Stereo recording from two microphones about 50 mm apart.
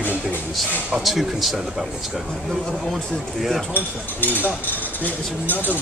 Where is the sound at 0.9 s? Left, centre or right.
Centre.